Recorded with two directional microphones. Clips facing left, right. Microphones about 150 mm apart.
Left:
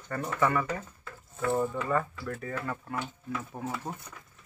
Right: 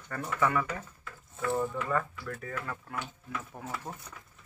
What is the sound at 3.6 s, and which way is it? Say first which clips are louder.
Speech: left 6 dB; 20° left (ahead or behind).